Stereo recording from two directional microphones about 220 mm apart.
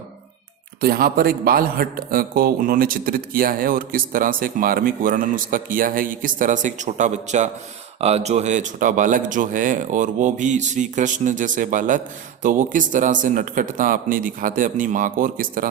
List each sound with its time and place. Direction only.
0.8 s speech: 45° right (ahead or behind)